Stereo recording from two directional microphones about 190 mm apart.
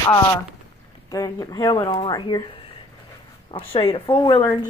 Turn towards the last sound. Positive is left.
turn(degrees=25)  # may be behind; listen again after turning